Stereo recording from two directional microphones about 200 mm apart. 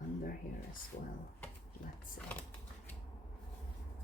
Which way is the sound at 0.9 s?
50° left (ahead or behind).